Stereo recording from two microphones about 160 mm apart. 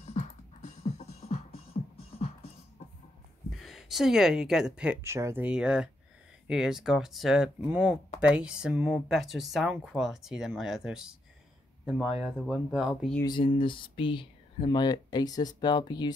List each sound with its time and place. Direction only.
0.0 s music: 45° left (ahead or behind)
3.5 s speech: centre (ahead or behind)
13.2 s speech: 30° left (ahead or behind)